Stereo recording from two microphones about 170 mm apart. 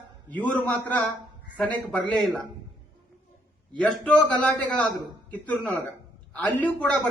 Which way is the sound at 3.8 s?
5° left (ahead or behind).